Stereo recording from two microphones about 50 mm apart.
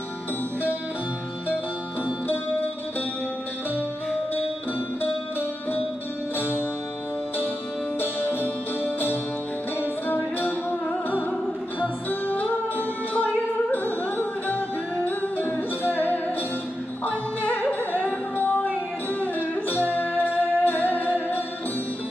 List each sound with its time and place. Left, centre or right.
6.3 s music: left
7.9 s music: left